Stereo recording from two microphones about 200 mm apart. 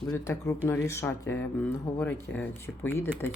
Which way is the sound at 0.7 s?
15° left (ahead or behind).